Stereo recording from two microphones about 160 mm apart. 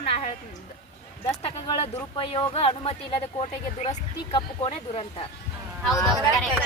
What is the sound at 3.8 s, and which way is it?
Speech, 45° left (ahead or behind).